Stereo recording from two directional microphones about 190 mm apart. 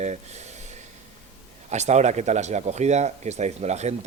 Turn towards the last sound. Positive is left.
turn(degrees=-35)  # may be behind; listen again after turning